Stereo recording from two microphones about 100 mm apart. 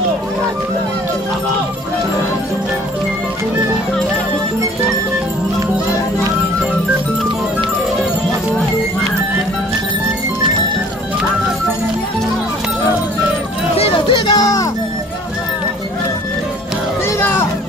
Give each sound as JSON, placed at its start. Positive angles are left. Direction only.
{"t": 13.9, "sound": "music", "side_deg": 55}
{"t": 14.3, "sound": "music", "side_deg": 35}
{"t": 17.2, "sound": "music", "side_deg": 25}